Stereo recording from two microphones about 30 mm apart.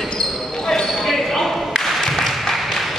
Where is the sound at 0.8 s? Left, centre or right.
Centre.